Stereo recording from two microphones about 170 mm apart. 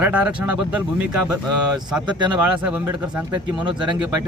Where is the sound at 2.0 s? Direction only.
25° right (ahead or behind).